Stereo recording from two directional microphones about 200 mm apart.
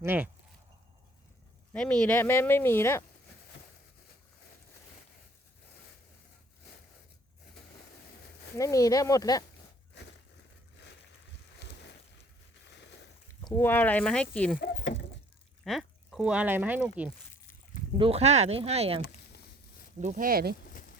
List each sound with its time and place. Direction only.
0.0 s speech: 10° right (ahead or behind)
1.7 s speech: 5° left (ahead or behind)
8.5 s speech: 15° left (ahead or behind)
11.6 s boat: 60° left (ahead or behind)
12.7 s a sound: 60° left (ahead or behind)
13.4 s speech: 10° left (ahead or behind)
14.6 s a sound: 60° left (ahead or behind)
15.6 s speech: centre (ahead or behind)
17.9 s speech: 25° right (ahead or behind); by 20.6 s 50° right (ahead or behind)